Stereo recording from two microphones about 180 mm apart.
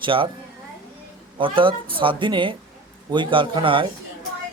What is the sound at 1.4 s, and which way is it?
Speech, 30° right (ahead or behind).